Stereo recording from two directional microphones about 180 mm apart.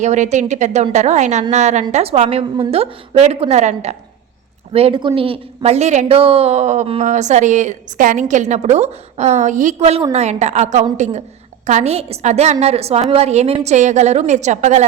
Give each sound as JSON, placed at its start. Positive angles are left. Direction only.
{"t": 0.0, "sound": "a woman's voice", "side_deg": -40}